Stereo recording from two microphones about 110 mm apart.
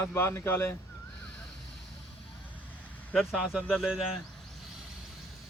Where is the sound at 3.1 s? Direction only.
5° right (ahead or behind).